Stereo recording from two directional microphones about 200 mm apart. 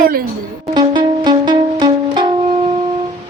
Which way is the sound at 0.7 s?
20° right (ahead or behind).